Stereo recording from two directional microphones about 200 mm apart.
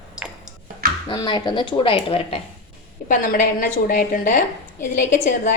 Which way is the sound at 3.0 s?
40° left (ahead or behind).